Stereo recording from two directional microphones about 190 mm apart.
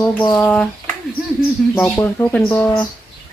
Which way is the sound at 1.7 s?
10° left (ahead or behind).